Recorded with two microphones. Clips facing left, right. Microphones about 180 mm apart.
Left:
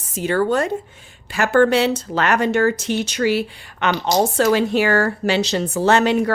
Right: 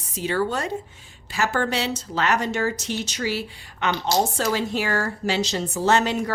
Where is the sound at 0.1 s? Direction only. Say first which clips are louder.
Left 6 dB; 50° left (ahead or behind).